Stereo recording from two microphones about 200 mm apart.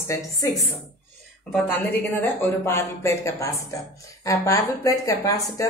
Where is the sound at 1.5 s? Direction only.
10° left (ahead or behind).